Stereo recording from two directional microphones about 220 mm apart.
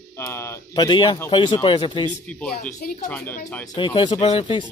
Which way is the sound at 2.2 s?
5° left (ahead or behind).